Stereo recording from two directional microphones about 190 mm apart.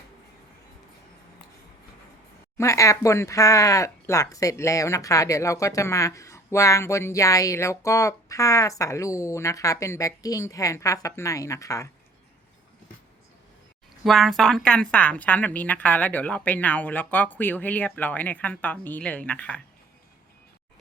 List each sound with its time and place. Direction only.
2.6 s speech: 15° left (ahead or behind)
14.0 s speech: centre (ahead or behind)